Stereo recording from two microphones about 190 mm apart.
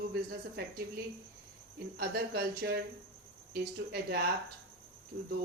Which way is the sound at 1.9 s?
60° right (ahead or behind).